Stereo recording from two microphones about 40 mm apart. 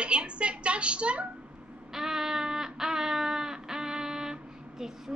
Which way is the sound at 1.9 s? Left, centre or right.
Centre.